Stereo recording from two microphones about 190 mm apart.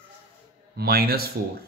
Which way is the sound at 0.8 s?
55° right (ahead or behind).